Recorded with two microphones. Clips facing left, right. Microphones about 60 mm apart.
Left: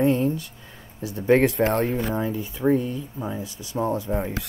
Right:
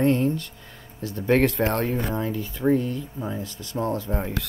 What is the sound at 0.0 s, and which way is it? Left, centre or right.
Speech, centre.